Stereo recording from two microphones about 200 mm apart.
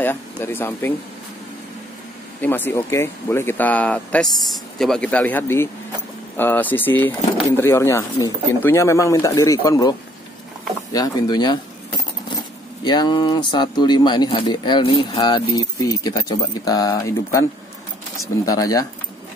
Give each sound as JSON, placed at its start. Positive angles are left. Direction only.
{"t": 0.0, "sound": "speech", "side_deg": 10}
{"t": 2.4, "sound": "speech", "side_deg": 10}
{"t": 12.8, "sound": "speech", "side_deg": 20}
{"t": 18.5, "sound": "speech", "side_deg": 15}